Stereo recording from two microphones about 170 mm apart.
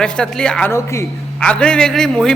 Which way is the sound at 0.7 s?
15° left (ahead or behind).